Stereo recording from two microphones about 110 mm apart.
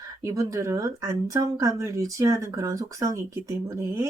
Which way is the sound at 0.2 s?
30° right (ahead or behind).